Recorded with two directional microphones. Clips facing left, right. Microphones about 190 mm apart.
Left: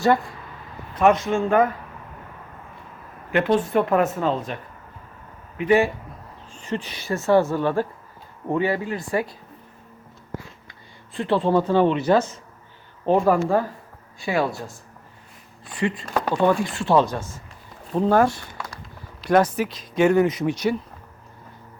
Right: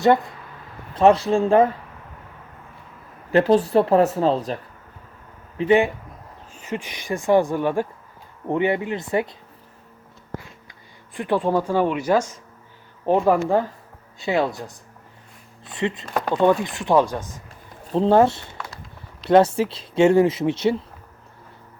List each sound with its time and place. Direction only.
0.0 s speech: 20° right (ahead or behind)
0.9 s speech: 30° right (ahead or behind)
3.3 s speech: 35° right (ahead or behind)
5.5 s speech: 20° right (ahead or behind)
6.5 s speech: 10° right (ahead or behind)
11.1 s speech: 15° right (ahead or behind)
17.9 s speech: 25° right (ahead or behind)